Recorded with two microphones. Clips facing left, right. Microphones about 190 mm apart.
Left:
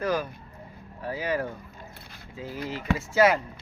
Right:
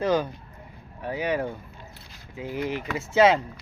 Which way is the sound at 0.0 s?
25° right (ahead or behind).